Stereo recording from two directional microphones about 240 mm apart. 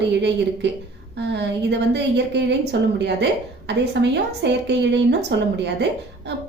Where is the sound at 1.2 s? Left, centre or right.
Right.